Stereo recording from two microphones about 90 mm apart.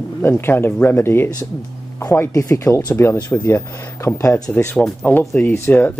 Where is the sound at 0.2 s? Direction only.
25° left (ahead or behind).